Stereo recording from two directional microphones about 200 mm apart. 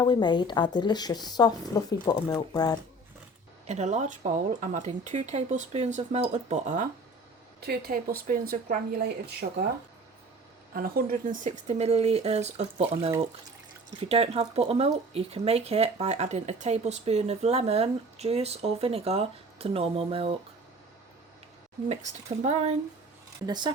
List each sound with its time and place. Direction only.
0.0 s a woman's voice: 20° left (ahead or behind)
3.7 s speech: 35° right (ahead or behind)
7.6 s speech: 50° right (ahead or behind)
10.8 s speech: 50° right (ahead or behind)
14.1 s speech: 30° right (ahead or behind)
21.8 s speech: 35° right (ahead or behind)
23.5 s speech: 20° right (ahead or behind)